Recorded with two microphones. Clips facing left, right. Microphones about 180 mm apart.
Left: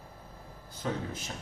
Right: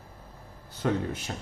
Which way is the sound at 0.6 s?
65° right (ahead or behind).